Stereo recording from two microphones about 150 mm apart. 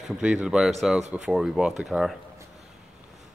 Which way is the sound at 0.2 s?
5° right (ahead or behind).